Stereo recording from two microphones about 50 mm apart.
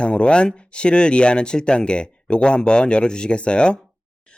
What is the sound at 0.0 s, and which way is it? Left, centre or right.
Speech, left.